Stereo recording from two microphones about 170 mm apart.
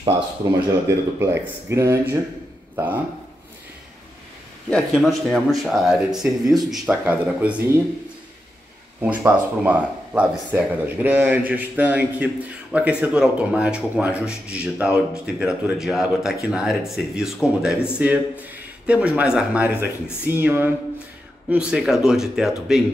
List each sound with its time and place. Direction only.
0.4 s a man's voice: 25° right (ahead or behind)
4.6 s a man's voice: 5° left (ahead or behind); by 7.8 s 10° right (ahead or behind)
9.0 s a man's voice: 10° right (ahead or behind)